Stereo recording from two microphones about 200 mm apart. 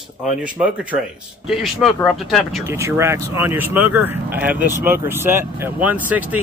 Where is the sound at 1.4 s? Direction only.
Centre (ahead or behind).